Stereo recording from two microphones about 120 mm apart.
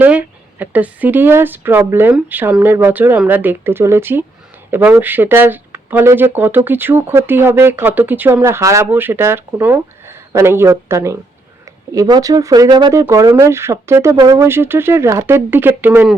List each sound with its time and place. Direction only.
0.0 s speech: 15° right (ahead or behind)
14.2 s speech: 35° right (ahead or behind)
14.4 s speech: 20° right (ahead or behind)